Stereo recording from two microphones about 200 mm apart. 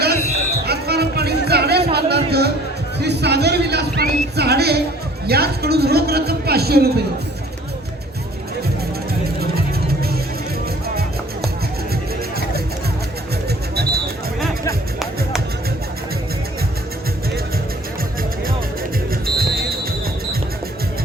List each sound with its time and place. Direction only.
0.6 s music: 55° right (ahead or behind)
5.2 s speech: 50° right (ahead or behind)
9.4 s music: 50° right (ahead or behind)
19.2 s music: 50° right (ahead or behind)